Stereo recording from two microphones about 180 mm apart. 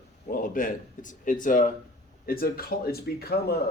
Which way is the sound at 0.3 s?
50° left (ahead or behind).